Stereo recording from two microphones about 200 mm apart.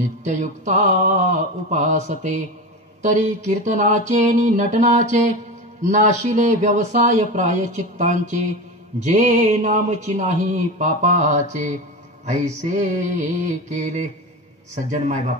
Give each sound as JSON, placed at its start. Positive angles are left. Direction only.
{"t": 0.2, "sound": "speech", "side_deg": -35}